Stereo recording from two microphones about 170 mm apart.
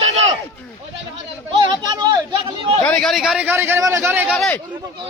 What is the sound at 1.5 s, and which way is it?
Speech, 25° right (ahead or behind).